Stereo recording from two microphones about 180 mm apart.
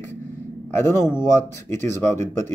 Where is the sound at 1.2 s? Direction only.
15° left (ahead or behind).